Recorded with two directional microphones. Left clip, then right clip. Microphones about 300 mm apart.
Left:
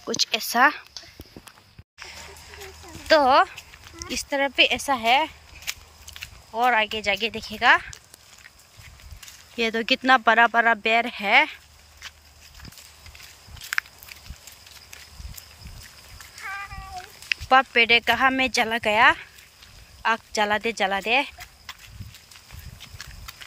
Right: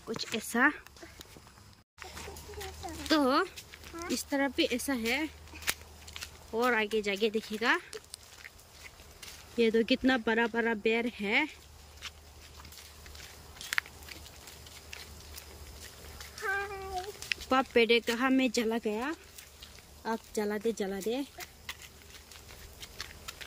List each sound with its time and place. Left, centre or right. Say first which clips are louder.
0.3 s speech: left 8 dB; centre
3.1 s speech: left 11 dB; centre
9.6 s speech: left 4 dB; centre
13.7 s walk: left 6 dB; centre
17.3 s speech: left 10 dB; centre
18.9 s speech: left 17 dB; left
20.7 s speech: left 13 dB; left
21.0 s speech: left 13 dB; centre